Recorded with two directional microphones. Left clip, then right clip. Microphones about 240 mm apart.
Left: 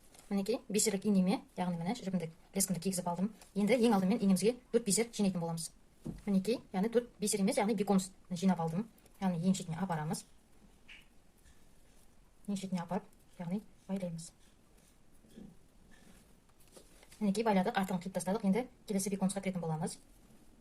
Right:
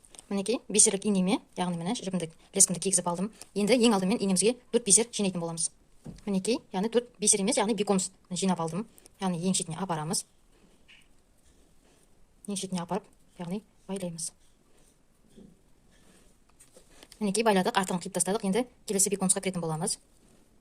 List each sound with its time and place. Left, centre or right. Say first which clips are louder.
0.1 s speech: right 5 dB; right
12.5 s a woman's voice: right 6 dB; right
17.2 s a woman's voice: right 7 dB; right